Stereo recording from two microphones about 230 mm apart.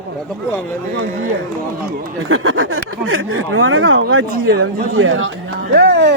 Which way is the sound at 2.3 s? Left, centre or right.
Right.